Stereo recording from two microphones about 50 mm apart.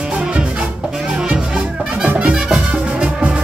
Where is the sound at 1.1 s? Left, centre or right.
Right.